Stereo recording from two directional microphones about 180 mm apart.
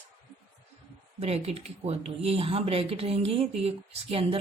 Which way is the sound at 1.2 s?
35° right (ahead or behind).